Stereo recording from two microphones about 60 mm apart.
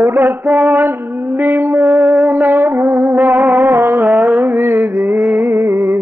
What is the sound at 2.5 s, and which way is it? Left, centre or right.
Music, right.